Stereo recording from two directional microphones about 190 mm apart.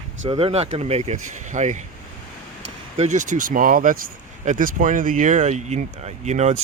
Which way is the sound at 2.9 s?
35° right (ahead or behind).